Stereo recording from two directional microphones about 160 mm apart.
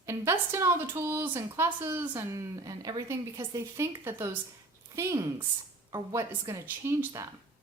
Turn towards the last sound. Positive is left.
turn(degrees=-15)  # may be behind; listen again after turning